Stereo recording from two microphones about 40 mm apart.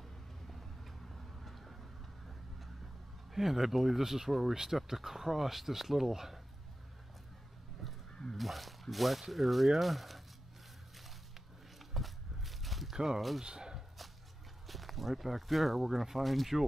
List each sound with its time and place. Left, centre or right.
0.5 s vehicle: centre
3.3 s speech: centre
8.1 s crow: centre
8.4 s speech: centre
11.9 s a sound: centre
12.9 s speech: centre
13.4 s a sound: centre
14.7 s speech: centre